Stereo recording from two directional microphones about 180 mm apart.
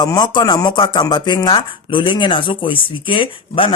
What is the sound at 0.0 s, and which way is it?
Speech, 20° left (ahead or behind).